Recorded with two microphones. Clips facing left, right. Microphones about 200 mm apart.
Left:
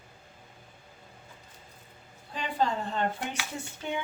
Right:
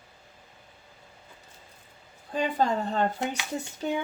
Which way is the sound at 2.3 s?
45° right (ahead or behind).